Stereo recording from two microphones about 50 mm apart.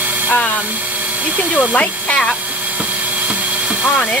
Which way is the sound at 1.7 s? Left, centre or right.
Left.